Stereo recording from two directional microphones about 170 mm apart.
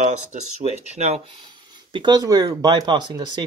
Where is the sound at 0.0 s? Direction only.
40° right (ahead or behind).